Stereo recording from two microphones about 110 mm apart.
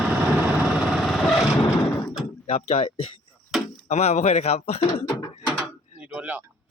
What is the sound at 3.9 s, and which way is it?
Speech, 90° left.